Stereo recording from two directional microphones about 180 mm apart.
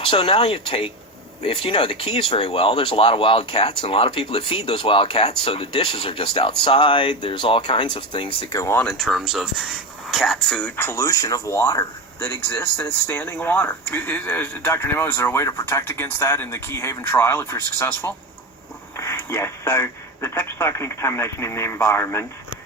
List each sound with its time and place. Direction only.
0.0 s speech: 30° left (ahead or behind)
9.0 s speech: centre (ahead or behind)